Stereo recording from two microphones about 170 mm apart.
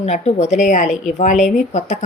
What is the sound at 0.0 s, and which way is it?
A woman's voice, 40° left (ahead or behind).